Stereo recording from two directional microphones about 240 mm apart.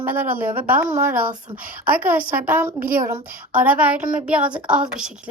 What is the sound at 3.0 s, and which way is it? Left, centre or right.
A woman's voice, centre.